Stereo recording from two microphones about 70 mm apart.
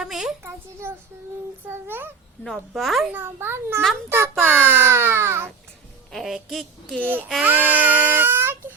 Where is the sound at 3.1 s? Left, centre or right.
Right.